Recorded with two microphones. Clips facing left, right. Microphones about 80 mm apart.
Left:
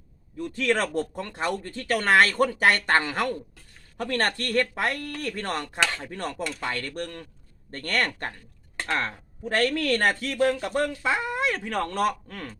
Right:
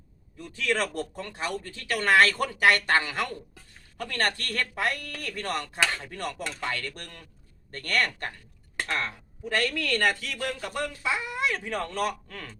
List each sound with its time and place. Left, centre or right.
0.5 s a man's voice: left